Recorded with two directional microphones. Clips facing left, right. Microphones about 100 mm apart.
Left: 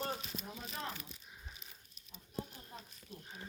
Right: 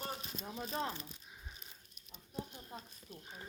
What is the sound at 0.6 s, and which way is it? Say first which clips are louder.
Speech: right 7 dB; 30° right (ahead or behind).